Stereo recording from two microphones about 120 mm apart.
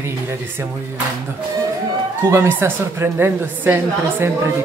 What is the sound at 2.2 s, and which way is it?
A woman's voice, 20° right (ahead or behind).